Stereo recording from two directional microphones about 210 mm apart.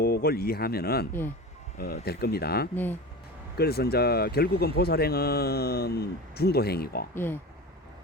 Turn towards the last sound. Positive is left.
turn(degrees=10)  # may be behind; listen again after turning